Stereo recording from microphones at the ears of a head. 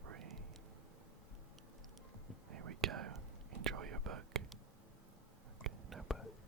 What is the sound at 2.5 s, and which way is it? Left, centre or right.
Whispering, right.